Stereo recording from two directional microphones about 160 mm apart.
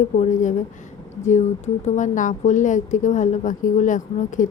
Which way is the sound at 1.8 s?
50° left (ahead or behind).